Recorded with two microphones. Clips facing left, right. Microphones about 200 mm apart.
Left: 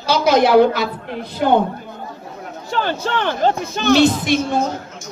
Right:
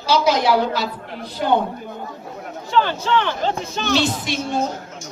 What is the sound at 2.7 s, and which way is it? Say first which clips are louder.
Speech: right 2 dB; 50° left (ahead or behind).